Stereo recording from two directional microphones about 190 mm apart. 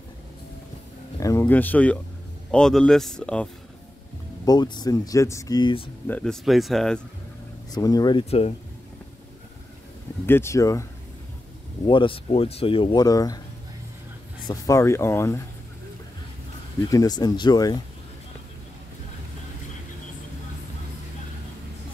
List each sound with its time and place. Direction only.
1.2 s speech: 15° left (ahead or behind)
4.5 s speech: 20° left (ahead or behind)
6.0 s speech: 5° left (ahead or behind)
7.7 s speech: 20° left (ahead or behind)
10.2 s speech: 15° left (ahead or behind)
14.5 s speech: 15° left (ahead or behind)
16.9 s speech: 20° left (ahead or behind)